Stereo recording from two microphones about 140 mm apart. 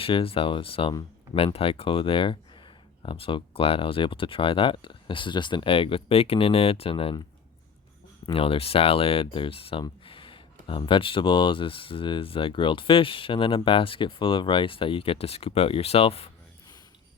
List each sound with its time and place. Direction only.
0.0 s speech: 40° left (ahead or behind)
8.3 s speech: 40° left (ahead or behind)